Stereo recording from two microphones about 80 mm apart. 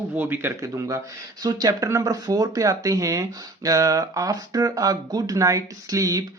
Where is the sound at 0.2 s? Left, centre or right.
Right.